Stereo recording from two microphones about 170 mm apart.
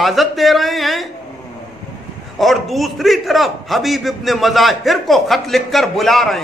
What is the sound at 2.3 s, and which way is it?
A man's voice, centre (ahead or behind).